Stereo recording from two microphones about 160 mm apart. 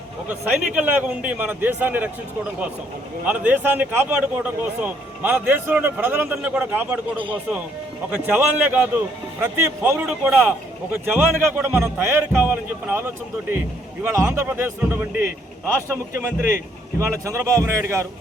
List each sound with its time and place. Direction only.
0.3 s a man's voice: 10° right (ahead or behind)
3.2 s a man's voice: 10° right (ahead or behind)
8.1 s a man's voice: 10° right (ahead or behind)
16.1 s a man's voice: 60° left (ahead or behind)
17.0 s speech: 20° right (ahead or behind)